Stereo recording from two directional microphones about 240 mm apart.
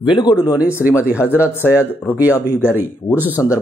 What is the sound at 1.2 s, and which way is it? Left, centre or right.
Speech, centre.